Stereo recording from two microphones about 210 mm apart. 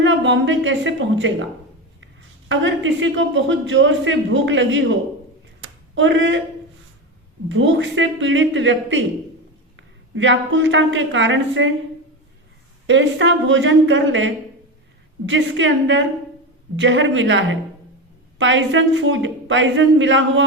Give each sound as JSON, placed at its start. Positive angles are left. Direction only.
{"t": 0.0, "sound": "a man's voice", "side_deg": -60}
{"t": 2.5, "sound": "a man's voice", "side_deg": -65}
{"t": 5.5, "sound": "a sound", "side_deg": -65}
{"t": 7.4, "sound": "a man's voice", "side_deg": -60}
{"t": 12.9, "sound": "a man's voice", "side_deg": -60}